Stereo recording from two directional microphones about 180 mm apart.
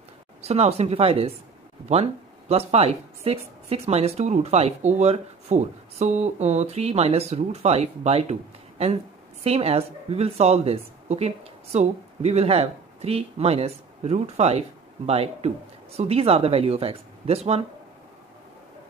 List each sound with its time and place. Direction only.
0.4 s a woman's voice: 35° right (ahead or behind)